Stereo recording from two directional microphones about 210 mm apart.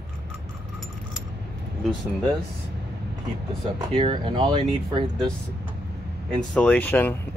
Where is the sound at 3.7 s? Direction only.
20° right (ahead or behind).